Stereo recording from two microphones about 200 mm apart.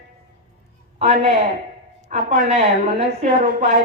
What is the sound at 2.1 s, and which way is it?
Speech, 40° right (ahead or behind).